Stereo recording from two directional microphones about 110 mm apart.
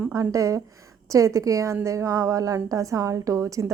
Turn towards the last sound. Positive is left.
turn(degrees=-30)  # may be behind; listen again after turning